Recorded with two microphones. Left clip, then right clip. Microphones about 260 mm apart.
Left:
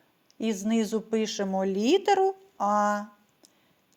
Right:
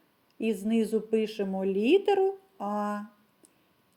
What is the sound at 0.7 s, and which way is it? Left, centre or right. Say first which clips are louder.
Speech: even; centre.